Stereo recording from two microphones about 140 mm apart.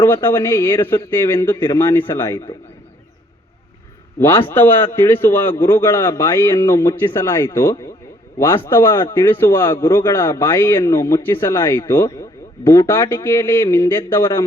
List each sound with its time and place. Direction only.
0.0 s a man's voice: 15° left (ahead or behind)
4.2 s a man's voice: 15° left (ahead or behind)